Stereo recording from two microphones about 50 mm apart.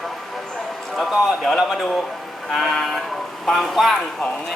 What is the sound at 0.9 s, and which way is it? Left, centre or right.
A man's voice, centre.